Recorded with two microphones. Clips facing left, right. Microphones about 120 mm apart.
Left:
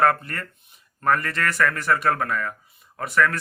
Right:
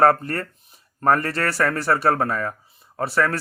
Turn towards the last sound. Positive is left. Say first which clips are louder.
# right 1 dB
turn(degrees=-30)  # may be behind; listen again after turning